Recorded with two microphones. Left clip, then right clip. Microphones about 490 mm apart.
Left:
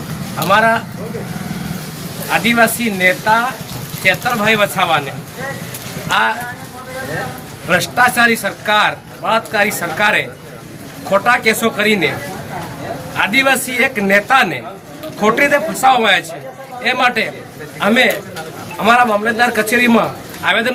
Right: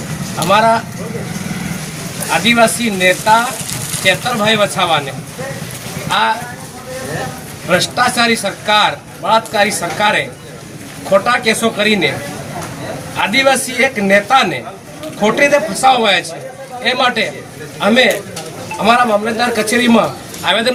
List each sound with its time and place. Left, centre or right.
0.5 s a man's voice: left
2.3 s a man's voice: left
7.7 s a man's voice: left
13.1 s a man's voice: left